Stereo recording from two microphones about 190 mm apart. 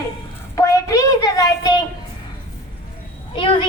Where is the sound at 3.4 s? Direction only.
30° left (ahead or behind).